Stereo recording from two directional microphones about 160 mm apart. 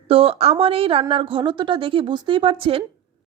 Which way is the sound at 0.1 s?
35° right (ahead or behind).